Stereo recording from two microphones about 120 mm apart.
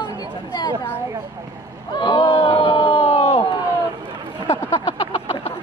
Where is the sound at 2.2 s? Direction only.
55° left (ahead or behind).